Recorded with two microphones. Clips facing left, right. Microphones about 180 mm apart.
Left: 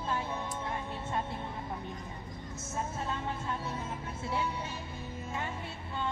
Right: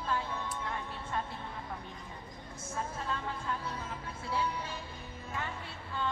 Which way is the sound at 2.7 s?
25° left (ahead or behind).